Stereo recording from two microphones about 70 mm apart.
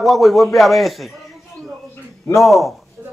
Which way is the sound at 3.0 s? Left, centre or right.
Right.